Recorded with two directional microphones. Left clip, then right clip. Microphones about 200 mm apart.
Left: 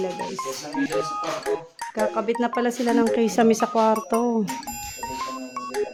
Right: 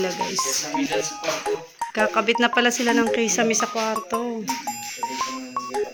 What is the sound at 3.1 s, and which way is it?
Speech, 30° left (ahead or behind).